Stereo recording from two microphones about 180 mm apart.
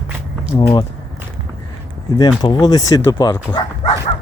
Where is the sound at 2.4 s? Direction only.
25° left (ahead or behind).